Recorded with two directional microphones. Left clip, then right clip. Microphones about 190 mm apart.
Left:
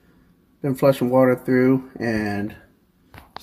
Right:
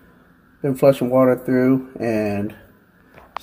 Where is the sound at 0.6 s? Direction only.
15° left (ahead or behind).